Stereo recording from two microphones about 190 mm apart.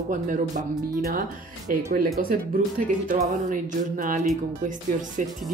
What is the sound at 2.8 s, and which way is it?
A woman's voice, 45° right (ahead or behind).